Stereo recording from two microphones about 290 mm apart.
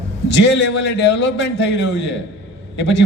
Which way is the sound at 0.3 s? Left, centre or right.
Left.